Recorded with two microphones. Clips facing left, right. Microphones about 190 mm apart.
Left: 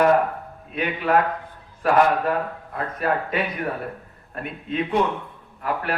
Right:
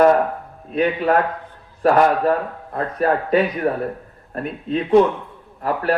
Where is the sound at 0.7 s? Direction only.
35° right (ahead or behind).